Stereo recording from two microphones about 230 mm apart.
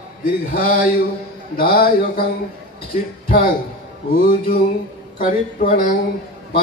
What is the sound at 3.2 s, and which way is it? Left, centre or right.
Speech, left.